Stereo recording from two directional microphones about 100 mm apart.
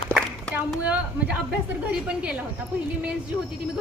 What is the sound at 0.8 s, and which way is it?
Speech, 10° right (ahead or behind).